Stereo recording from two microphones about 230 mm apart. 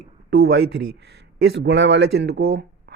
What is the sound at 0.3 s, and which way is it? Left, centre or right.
Speech, right.